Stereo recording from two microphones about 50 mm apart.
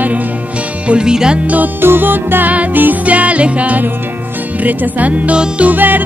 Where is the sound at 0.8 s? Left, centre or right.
Centre.